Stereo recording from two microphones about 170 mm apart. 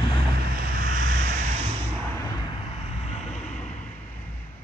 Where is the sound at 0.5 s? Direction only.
60° right (ahead or behind); by 1.7 s 40° right (ahead or behind).